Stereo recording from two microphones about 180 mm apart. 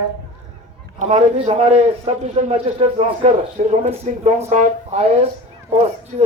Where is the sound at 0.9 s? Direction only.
35° right (ahead or behind).